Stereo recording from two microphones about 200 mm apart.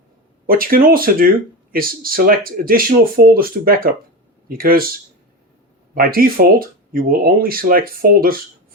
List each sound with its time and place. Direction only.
0.4 s speech: 45° right (ahead or behind)
5.9 s speech: 45° right (ahead or behind)